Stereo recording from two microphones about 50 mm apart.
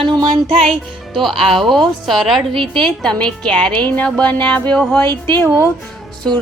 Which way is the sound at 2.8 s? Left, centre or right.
Centre.